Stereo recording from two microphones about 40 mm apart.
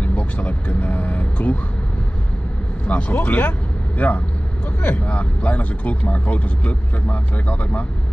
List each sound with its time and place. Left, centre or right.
0.0 s vehicle: left
2.9 s speech: left
4.0 s speech: left